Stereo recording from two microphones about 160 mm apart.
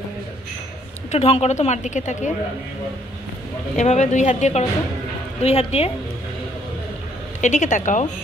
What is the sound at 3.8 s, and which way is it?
A woman's voice, 45° left (ahead or behind).